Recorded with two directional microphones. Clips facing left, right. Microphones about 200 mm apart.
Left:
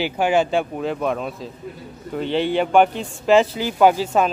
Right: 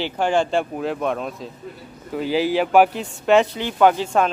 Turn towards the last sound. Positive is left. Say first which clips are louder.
# left 1 dB
turn(degrees=5)  # may be behind; listen again after turning